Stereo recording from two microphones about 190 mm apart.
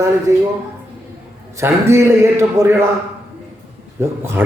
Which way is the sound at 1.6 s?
15° right (ahead or behind).